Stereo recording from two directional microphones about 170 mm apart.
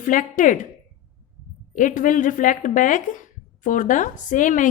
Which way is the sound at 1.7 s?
50° left (ahead or behind).